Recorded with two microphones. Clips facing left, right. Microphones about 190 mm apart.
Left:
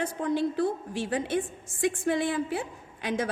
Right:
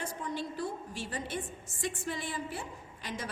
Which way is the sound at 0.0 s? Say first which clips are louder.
Left 10 dB; 60° left (ahead or behind).